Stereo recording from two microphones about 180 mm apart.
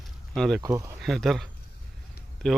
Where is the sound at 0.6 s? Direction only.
20° right (ahead or behind).